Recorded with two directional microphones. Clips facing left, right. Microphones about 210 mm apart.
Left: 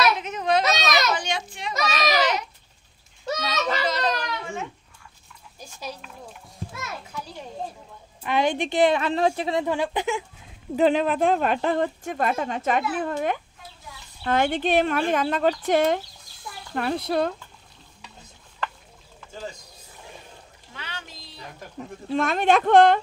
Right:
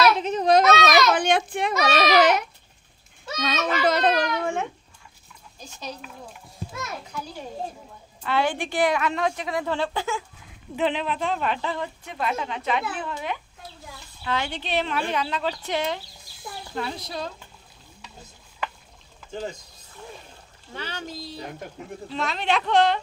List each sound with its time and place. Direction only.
0.2 s baby cry: 35° right (ahead or behind)
0.7 s baby cry: 55° right (ahead or behind)
3.8 s a sound: 55° right (ahead or behind)
5.8 s a child's voice: 5° left (ahead or behind)
8.2 s a woman's voice: 20° left (ahead or behind)
9.7 s a woman's voice: 15° left (ahead or behind)
10.8 s speech: 45° left (ahead or behind)
20.7 s speech: 40° right (ahead or behind)
22.1 s speech: 50° left (ahead or behind)